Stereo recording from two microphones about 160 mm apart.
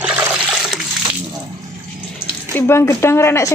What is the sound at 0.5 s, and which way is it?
Water, 5° right (ahead or behind).